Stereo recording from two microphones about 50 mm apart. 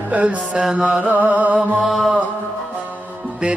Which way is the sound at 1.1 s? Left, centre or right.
Right.